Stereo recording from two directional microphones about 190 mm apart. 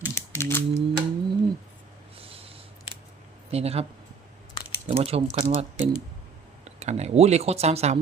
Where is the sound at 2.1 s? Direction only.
30° right (ahead or behind).